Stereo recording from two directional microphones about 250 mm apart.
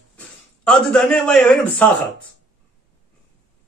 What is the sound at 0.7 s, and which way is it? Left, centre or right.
Speech, centre.